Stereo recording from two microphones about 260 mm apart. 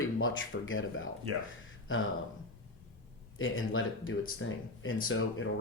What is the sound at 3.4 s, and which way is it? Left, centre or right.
Speech, left.